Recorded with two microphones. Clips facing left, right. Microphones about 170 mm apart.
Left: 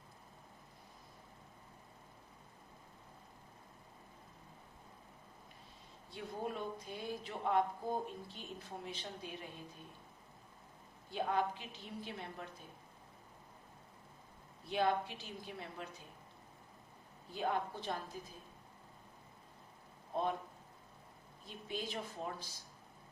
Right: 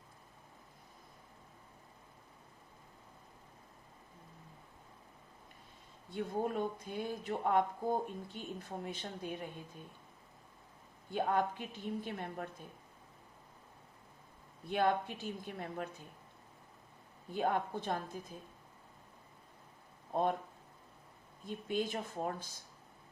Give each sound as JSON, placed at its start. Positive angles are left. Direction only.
{"t": 6.1, "sound": "speech", "side_deg": -50}
{"t": 11.1, "sound": "speech", "side_deg": -50}
{"t": 14.7, "sound": "speech", "side_deg": -50}
{"t": 17.3, "sound": "speech", "side_deg": -50}
{"t": 21.4, "sound": "speech", "side_deg": -50}